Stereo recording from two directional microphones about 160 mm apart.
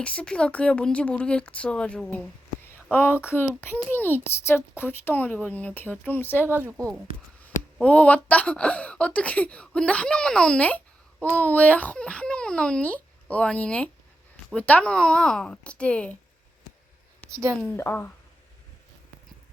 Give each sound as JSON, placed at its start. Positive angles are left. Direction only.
{"t": 0.0, "sound": "speech", "side_deg": 10}
{"t": 6.5, "sound": "speech", "side_deg": -15}
{"t": 7.4, "sound": "speech", "side_deg": 10}
{"t": 17.7, "sound": "speech", "side_deg": 15}